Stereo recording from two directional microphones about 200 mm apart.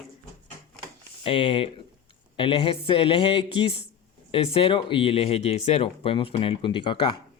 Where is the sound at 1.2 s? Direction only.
25° left (ahead or behind).